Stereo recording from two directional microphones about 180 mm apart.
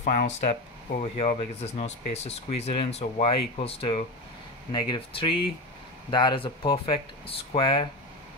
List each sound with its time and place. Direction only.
0.1 s speech: 40° left (ahead or behind)